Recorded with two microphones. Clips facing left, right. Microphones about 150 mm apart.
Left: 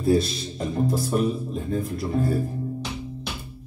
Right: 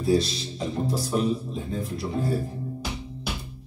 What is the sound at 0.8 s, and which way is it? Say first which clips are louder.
Speech: left 2 dB; 50° left (ahead or behind).